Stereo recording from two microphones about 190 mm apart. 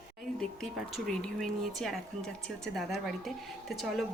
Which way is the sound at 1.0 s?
Centre (ahead or behind).